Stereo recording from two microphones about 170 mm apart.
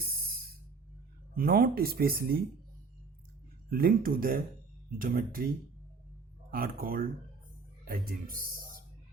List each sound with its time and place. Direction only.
0.0 s music: 60° right (ahead or behind)
1.4 s speech: 55° right (ahead or behind)
3.7 s speech: 60° right (ahead or behind)
6.5 s speech: 60° right (ahead or behind)